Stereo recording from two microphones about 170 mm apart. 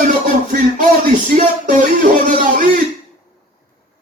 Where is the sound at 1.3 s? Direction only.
50° right (ahead or behind).